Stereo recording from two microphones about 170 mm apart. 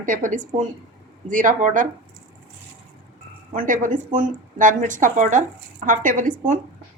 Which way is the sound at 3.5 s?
50° right (ahead or behind).